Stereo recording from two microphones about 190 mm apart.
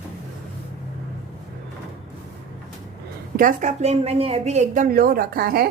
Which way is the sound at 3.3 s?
40° right (ahead or behind).